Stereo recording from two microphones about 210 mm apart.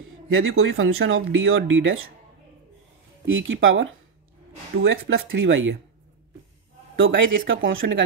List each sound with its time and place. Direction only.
0.3 s speech: 75° right (ahead or behind)
3.3 s speech: 65° right (ahead or behind)
7.0 s speech: 65° right (ahead or behind)